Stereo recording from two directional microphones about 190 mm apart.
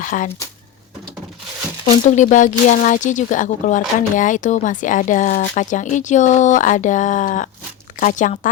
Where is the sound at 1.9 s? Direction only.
40° left (ahead or behind).